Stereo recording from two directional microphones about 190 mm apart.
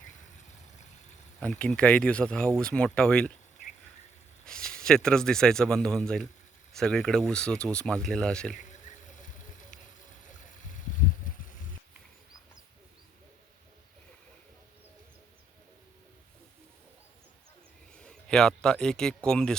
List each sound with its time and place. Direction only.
1.4 s speech: 5° left (ahead or behind)
4.4 s speech: 5° left (ahead or behind)
8.5 s a sound: 40° left (ahead or behind)
17.9 s a man's voice: 5° left (ahead or behind)